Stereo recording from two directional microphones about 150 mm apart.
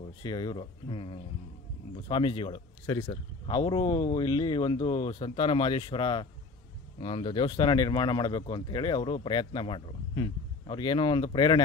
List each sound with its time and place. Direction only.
0.2 s speech: 30° left (ahead or behind)